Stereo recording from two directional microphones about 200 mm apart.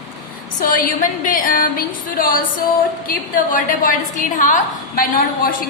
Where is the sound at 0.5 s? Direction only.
45° left (ahead or behind).